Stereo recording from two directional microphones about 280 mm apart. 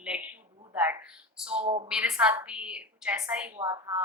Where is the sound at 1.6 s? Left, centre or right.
Right.